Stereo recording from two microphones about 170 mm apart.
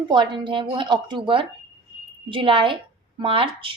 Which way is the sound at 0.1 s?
30° right (ahead or behind).